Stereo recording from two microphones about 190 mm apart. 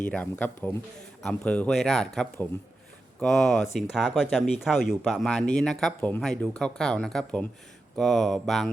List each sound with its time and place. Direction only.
0.0 s speech: 5° left (ahead or behind)